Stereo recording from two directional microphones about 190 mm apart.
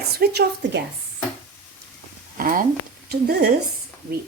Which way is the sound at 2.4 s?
45° right (ahead or behind).